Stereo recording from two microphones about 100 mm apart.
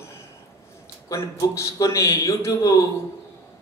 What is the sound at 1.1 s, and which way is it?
A man's voice, 30° left (ahead or behind).